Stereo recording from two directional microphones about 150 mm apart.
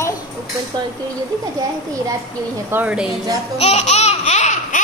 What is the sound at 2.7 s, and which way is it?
Speech, 10° right (ahead or behind).